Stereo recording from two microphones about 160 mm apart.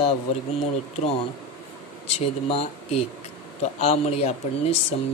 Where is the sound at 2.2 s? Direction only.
40° left (ahead or behind).